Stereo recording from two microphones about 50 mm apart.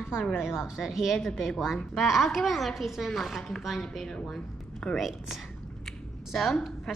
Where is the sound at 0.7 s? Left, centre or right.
Centre.